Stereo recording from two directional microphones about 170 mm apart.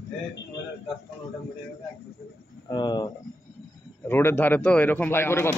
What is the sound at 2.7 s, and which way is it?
Speech, 25° left (ahead or behind).